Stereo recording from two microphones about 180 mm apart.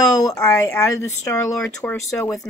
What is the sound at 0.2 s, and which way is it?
Speech, 20° left (ahead or behind).